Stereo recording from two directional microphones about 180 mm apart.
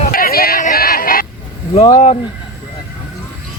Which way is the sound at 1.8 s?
35° left (ahead or behind).